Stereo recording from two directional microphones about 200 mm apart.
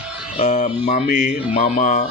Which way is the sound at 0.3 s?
35° left (ahead or behind).